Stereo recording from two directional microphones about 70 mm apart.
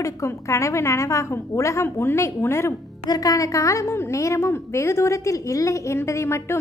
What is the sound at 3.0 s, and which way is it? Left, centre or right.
A woman's voice, left.